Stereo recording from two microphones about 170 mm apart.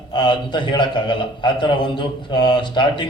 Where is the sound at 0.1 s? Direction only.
25° left (ahead or behind).